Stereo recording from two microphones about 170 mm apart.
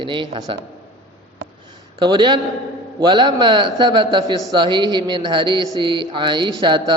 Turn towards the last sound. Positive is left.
turn(degrees=-30)  # may be behind; listen again after turning